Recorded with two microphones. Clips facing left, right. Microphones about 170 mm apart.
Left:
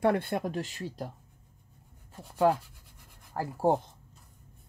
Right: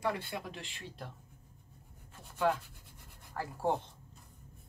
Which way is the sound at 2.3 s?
40° left (ahead or behind).